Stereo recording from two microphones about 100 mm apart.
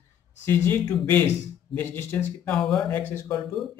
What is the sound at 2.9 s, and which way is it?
Speech, 20° left (ahead or behind).